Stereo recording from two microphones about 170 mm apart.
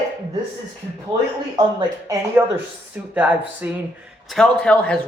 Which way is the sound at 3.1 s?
10° right (ahead or behind).